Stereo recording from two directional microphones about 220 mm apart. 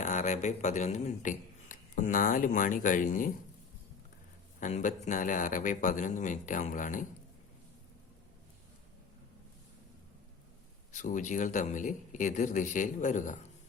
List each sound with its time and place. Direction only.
0.0 s speech: 35° left (ahead or behind)
4.6 s speech: 35° left (ahead or behind)
10.9 s speech: 35° left (ahead or behind)